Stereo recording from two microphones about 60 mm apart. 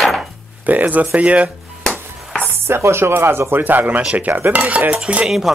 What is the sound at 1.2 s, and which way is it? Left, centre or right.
Cutlery, right.